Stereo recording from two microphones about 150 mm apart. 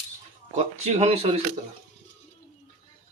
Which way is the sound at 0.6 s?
50° right (ahead or behind).